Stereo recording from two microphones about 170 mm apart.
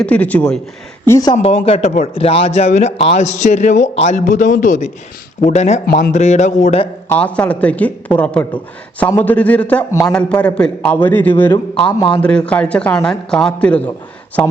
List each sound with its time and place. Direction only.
0.0 s a man's voice: 10° left (ahead or behind)
1.0 s speech: 20° left (ahead or behind)
1.4 s a man's voice: 35° left (ahead or behind)
5.8 s speech: 65° left (ahead or behind)
6.1 s a man's voice: 45° left (ahead or behind)
7.1 s a man's voice: 10° left (ahead or behind)
11.5 s speech: 30° left (ahead or behind)
12.2 s a man's voice: 5° left (ahead or behind)